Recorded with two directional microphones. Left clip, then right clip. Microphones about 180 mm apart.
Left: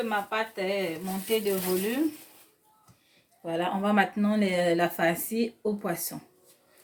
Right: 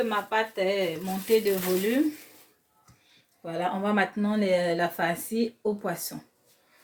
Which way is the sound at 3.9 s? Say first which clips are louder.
Left 1 dB; 10° left (ahead or behind).